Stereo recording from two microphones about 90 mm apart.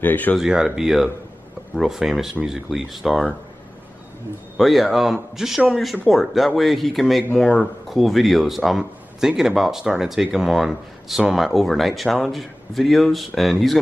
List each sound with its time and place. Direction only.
0.0 s speech: 20° left (ahead or behind)
0.4 s speech: 10° right (ahead or behind)
4.6 s speech: centre (ahead or behind)